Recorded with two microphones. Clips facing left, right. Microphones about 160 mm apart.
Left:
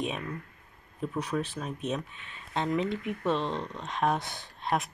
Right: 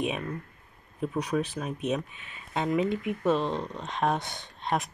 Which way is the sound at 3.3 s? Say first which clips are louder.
Right 3 dB; 35° right (ahead or behind).